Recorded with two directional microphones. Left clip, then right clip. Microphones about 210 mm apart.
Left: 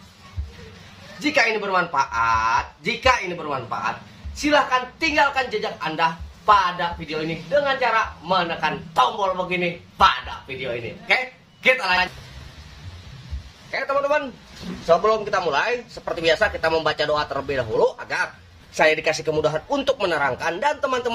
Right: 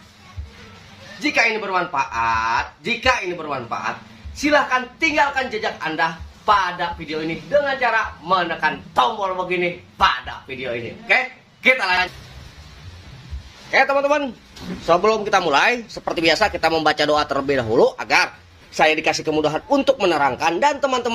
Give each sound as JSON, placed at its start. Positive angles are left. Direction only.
{"t": 1.2, "sound": "speech", "side_deg": 0}
{"t": 11.6, "sound": "speech", "side_deg": 0}
{"t": 13.7, "sound": "speech", "side_deg": -15}